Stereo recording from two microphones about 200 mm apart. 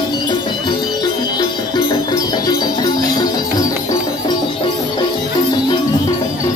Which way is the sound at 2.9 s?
20° left (ahead or behind).